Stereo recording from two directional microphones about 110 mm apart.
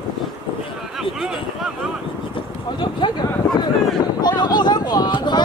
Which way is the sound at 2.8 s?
45° left (ahead or behind).